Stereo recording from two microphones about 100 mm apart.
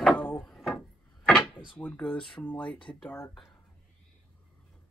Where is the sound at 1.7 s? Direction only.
15° left (ahead or behind).